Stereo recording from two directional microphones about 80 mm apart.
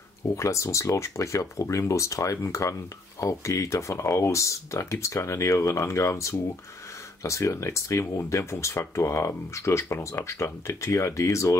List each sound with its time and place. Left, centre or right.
0.4 s speech: left